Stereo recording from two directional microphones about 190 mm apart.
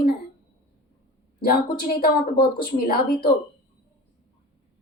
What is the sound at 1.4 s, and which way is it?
A woman's voice, 50° left (ahead or behind).